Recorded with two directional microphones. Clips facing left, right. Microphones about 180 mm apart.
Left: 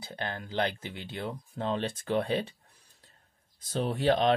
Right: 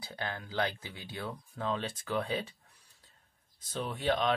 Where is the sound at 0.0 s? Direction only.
20° left (ahead or behind).